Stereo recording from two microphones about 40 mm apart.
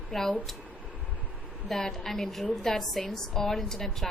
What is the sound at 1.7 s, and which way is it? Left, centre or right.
A woman's voice, centre.